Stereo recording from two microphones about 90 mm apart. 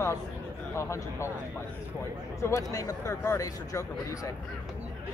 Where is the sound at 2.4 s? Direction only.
40° left (ahead or behind).